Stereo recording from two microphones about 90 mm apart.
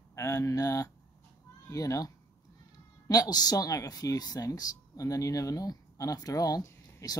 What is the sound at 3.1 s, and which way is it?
Speech, 45° left (ahead or behind).